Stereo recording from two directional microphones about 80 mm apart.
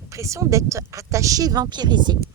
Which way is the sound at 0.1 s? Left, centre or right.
Right.